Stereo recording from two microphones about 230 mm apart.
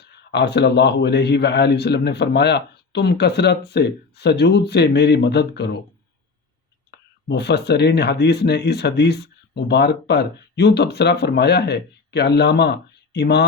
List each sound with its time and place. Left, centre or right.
0.0 s a man's voice: left
7.3 s a man's voice: left